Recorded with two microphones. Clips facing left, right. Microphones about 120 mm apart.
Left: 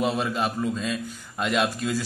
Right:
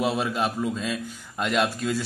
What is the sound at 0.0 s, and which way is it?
A man's voice, 5° right (ahead or behind).